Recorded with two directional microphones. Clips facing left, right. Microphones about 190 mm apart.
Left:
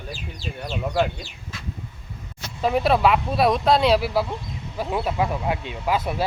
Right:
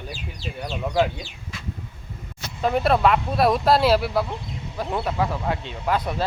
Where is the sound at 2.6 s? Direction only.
5° left (ahead or behind).